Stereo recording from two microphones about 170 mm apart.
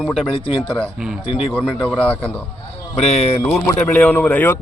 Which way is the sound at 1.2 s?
35° left (ahead or behind).